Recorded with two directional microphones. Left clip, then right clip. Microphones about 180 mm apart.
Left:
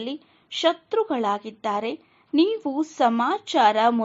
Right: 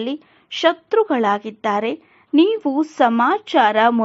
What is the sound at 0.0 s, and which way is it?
A woman's voice, 30° right (ahead or behind).